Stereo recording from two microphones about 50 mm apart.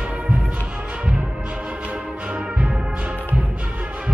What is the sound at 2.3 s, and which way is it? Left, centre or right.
Music, right.